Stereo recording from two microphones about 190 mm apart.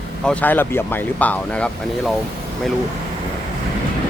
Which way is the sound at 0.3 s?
10° left (ahead or behind).